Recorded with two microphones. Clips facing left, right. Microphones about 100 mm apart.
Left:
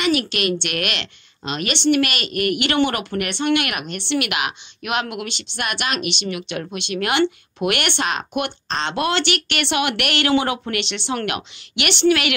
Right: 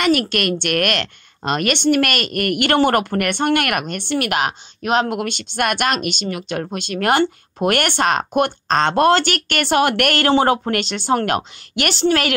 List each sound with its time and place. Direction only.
0.0 s speech: 50° right (ahead or behind); by 5.2 s 35° right (ahead or behind)
5.2 s speech: 50° right (ahead or behind)